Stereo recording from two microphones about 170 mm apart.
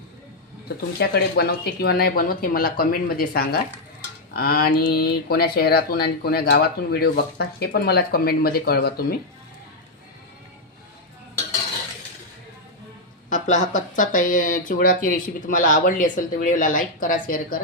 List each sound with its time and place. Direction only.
0.9 s speech: 65° left (ahead or behind)
13.3 s speech: 45° left (ahead or behind)